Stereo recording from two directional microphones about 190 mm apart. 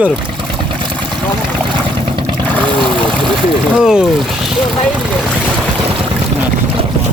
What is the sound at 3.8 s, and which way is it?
Speech, 5° right (ahead or behind).